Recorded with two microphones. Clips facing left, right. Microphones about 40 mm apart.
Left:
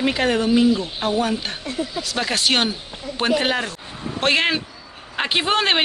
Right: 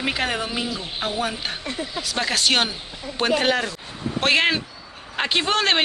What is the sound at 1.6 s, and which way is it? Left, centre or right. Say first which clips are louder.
Speech: left 3 dB; right.